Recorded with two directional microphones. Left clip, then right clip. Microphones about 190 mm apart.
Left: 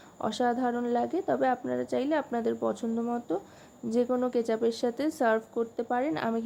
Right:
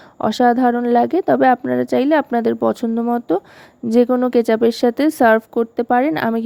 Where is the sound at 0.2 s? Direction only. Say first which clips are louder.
Right 14 dB; 40° right (ahead or behind).